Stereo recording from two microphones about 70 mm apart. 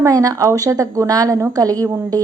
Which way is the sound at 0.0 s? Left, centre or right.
Right.